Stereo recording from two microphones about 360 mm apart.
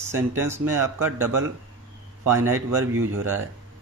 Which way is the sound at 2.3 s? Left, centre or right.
Centre.